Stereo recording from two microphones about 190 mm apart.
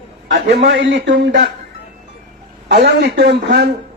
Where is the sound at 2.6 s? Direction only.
60° right (ahead or behind).